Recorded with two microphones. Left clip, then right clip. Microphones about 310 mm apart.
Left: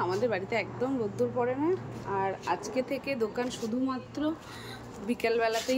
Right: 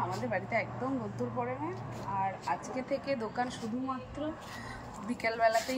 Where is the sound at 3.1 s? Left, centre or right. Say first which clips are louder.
Left 3 dB; centre.